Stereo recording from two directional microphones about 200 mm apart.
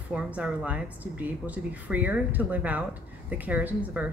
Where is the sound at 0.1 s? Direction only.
5° right (ahead or behind).